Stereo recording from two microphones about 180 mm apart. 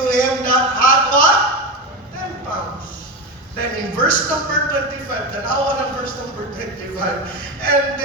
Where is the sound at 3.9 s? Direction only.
50° left (ahead or behind).